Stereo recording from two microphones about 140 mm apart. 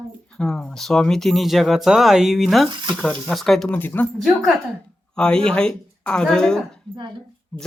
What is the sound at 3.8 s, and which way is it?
Speech, 15° left (ahead or behind).